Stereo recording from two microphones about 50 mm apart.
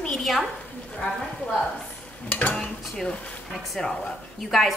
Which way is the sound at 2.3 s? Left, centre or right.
Left.